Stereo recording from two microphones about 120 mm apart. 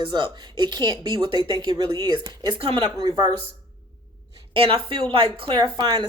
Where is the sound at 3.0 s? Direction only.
35° right (ahead or behind).